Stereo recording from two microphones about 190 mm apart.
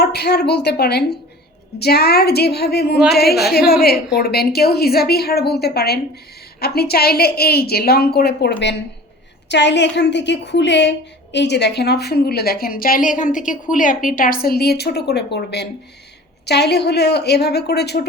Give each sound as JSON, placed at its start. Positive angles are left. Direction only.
{"t": 0.0, "sound": "a woman's voice", "side_deg": 60}